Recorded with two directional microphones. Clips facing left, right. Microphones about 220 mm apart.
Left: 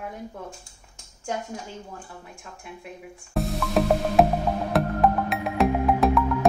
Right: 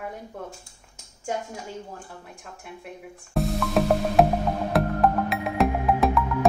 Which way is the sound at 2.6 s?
Centre (ahead or behind).